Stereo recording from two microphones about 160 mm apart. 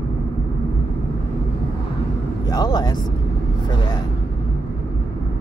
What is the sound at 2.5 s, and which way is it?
Speech, 25° left (ahead or behind).